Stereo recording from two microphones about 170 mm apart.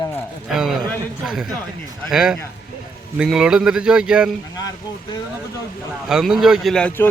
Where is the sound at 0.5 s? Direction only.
Centre (ahead or behind).